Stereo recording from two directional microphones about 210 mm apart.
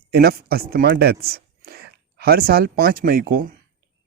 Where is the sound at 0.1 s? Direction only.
45° right (ahead or behind).